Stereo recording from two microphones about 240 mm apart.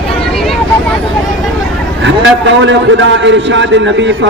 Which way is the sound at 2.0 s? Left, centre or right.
Right.